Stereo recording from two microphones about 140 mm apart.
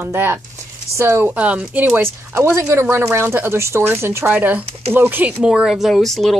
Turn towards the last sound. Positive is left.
turn(degrees=0)  # may be behind; listen again after turning